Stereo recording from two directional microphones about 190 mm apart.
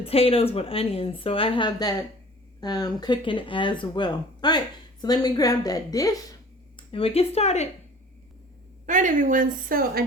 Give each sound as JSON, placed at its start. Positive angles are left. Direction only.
{"t": 0.0, "sound": "speech", "side_deg": 30}
{"t": 6.7, "sound": "speech", "side_deg": 30}
{"t": 8.9, "sound": "a woman's voice", "side_deg": -40}